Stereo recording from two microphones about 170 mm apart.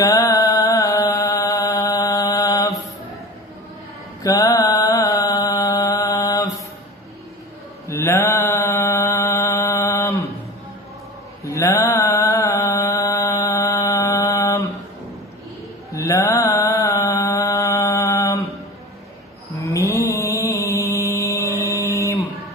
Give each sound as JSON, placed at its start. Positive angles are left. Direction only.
{"t": 0.0, "sound": "chant", "side_deg": 20}
{"t": 4.2, "sound": "mantra", "side_deg": 20}
{"t": 7.9, "sound": "mantra", "side_deg": 15}
{"t": 11.4, "sound": "mantra", "side_deg": 20}
{"t": 16.1, "sound": "mantra", "side_deg": 20}
{"t": 19.6, "sound": "mantra", "side_deg": 20}